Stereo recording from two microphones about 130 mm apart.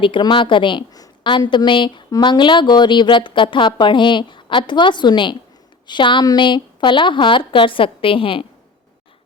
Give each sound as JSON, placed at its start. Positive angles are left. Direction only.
{"t": 0.0, "sound": "a woman's voice", "side_deg": 40}